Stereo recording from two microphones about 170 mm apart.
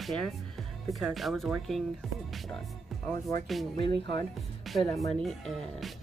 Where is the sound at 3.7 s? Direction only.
30° left (ahead or behind).